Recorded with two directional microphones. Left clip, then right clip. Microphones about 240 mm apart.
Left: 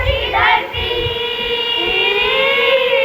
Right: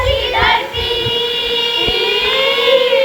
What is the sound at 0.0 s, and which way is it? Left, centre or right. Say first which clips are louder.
Music: right 1 dB; right.